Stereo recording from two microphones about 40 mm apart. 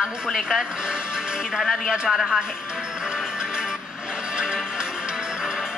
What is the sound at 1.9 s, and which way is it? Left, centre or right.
Speech, centre.